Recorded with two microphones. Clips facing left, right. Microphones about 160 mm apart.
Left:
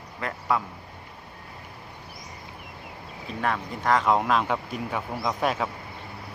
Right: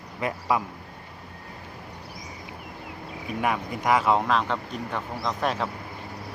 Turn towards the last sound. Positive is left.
turn(degrees=5)  # may be behind; listen again after turning